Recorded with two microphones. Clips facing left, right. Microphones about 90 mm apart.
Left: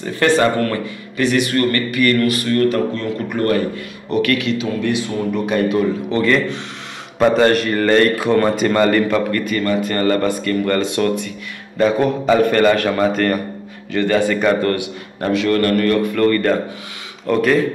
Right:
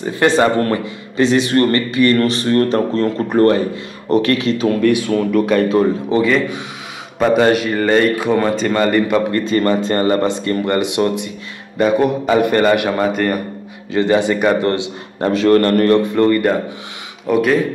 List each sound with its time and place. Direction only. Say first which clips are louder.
0.0 s a man's voice: right 1 dB; 20° right (ahead or behind)
4.6 s speech: right 6 dB; 55° right (ahead or behind)
6.0 s a man's voice: right 2 dB; 15° right (ahead or behind)
7.2 s a man's voice: even; 5° right (ahead or behind)
9.3 s a man's voice: right 3 dB; 25° right (ahead or behind); by 13.4 s 10° right (ahead or behind)
13.9 s a man's voice: right 2 dB; 20° right (ahead or behind)
14.7 s a man's voice: right 1 dB; 25° right (ahead or behind)
17.3 s speech: right 1 dB; 5° right (ahead or behind)